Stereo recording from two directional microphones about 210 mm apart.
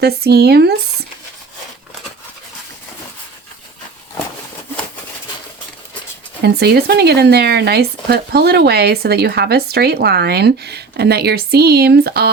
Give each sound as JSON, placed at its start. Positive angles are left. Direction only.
{"t": 0.0, "sound": "speech", "side_deg": -50}
{"t": 6.4, "sound": "speech", "side_deg": -50}